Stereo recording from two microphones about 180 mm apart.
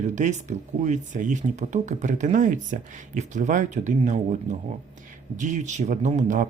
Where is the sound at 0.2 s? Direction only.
40° right (ahead or behind).